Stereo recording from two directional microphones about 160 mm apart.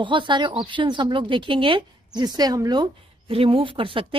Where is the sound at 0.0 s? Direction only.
30° right (ahead or behind).